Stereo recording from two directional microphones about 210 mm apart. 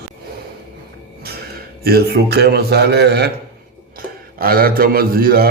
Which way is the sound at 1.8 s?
50° right (ahead or behind).